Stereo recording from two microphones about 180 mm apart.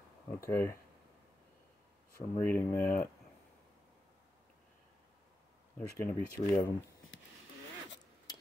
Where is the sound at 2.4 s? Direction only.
15° left (ahead or behind).